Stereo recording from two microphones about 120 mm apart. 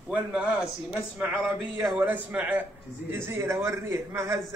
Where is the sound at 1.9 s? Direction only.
15° right (ahead or behind).